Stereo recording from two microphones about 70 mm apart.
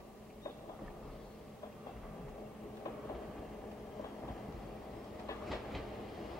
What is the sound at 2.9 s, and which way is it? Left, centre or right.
Train, left.